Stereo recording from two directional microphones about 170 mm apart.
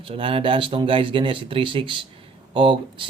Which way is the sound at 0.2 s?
30° right (ahead or behind).